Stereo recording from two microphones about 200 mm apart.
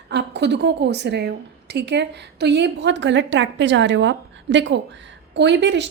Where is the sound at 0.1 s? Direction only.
60° right (ahead or behind).